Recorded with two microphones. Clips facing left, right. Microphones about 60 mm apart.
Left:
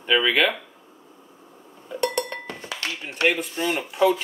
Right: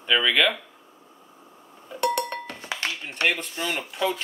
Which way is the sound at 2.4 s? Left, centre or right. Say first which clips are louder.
Left 2 dB; centre.